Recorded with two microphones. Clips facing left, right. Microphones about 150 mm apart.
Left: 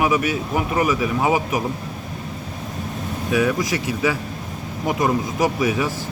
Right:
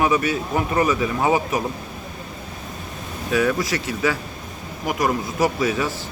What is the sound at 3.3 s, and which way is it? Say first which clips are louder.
Speech: even; 15° left (ahead or behind).